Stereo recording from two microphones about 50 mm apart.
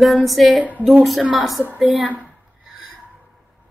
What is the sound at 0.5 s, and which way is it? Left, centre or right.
Speech, right.